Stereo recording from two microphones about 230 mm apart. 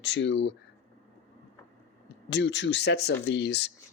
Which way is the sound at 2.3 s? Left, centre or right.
Left.